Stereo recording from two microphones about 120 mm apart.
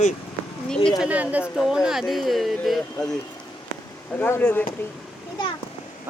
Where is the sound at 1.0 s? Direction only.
10° right (ahead or behind).